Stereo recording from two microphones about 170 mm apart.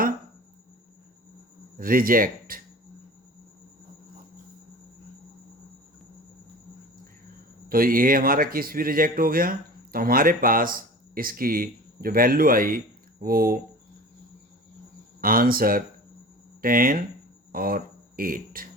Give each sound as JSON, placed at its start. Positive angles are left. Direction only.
{"t": 1.8, "sound": "speech", "side_deg": -55}
{"t": 7.7, "sound": "speech", "side_deg": -55}
{"t": 15.2, "sound": "speech", "side_deg": -55}